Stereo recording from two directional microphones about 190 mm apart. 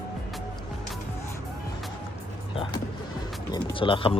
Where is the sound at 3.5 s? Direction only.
25° left (ahead or behind).